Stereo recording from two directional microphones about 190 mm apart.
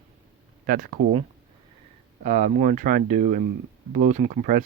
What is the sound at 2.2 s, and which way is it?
Speech, 40° right (ahead or behind).